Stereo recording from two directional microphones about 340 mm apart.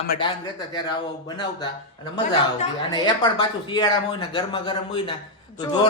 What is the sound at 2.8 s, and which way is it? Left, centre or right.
Speech, centre.